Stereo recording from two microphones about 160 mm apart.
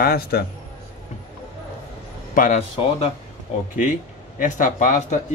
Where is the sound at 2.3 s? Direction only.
55° left (ahead or behind).